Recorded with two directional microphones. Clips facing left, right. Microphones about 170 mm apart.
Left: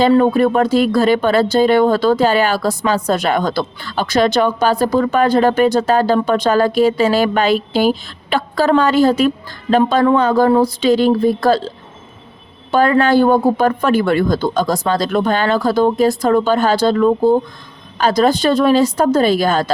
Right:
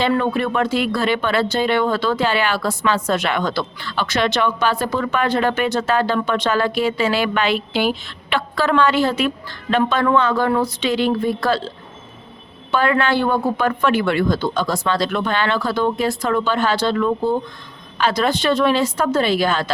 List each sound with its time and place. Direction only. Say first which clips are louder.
0.0 s speech: left 7 dB; 35° left (ahead or behind)
12.7 s speech: left 6 dB; 40° left (ahead or behind)